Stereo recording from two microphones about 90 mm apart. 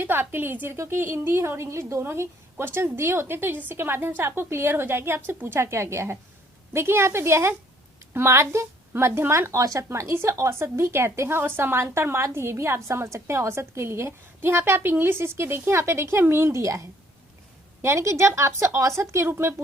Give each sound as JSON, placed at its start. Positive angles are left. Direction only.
{"t": 0.0, "sound": "a woman's voice", "side_deg": -25}
{"t": 17.8, "sound": "speech", "side_deg": -30}